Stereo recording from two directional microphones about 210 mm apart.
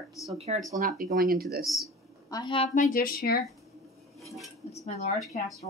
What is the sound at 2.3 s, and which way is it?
A woman's voice, 25° left (ahead or behind).